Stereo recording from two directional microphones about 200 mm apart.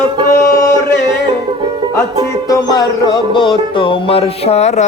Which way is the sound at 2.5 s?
20° left (ahead or behind).